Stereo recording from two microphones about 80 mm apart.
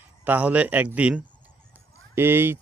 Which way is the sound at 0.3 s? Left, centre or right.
Centre.